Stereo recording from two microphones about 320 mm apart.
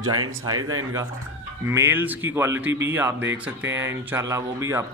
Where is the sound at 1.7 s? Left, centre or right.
Centre.